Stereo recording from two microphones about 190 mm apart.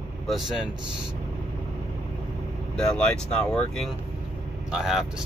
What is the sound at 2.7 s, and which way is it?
Speech, 5° left (ahead or behind).